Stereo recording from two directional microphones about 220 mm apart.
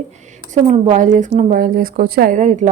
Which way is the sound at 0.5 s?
30° right (ahead or behind).